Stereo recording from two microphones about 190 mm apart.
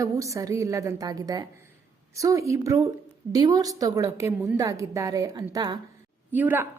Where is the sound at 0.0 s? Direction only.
15° right (ahead or behind).